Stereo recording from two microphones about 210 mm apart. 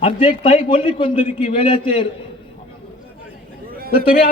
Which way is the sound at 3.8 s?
45° left (ahead or behind).